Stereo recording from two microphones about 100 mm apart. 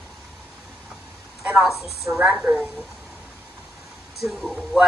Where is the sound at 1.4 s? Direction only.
10° right (ahead or behind).